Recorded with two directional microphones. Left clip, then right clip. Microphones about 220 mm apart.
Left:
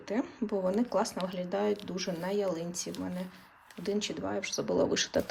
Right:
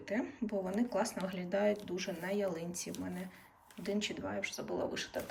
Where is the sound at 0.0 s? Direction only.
15° left (ahead or behind).